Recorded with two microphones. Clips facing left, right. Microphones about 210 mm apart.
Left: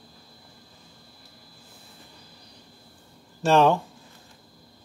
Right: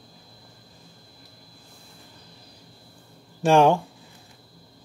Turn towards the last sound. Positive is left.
turn(degrees=-15)  # may be behind; listen again after turning